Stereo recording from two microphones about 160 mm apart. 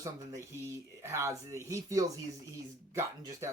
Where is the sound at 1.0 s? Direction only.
20° right (ahead or behind).